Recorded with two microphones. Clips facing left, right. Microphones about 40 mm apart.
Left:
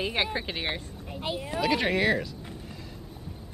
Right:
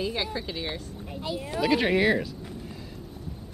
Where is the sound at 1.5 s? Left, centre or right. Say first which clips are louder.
Right 3 dB; centre.